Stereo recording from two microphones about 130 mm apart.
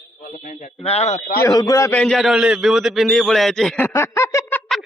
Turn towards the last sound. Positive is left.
turn(degrees=20)  # may be behind; listen again after turning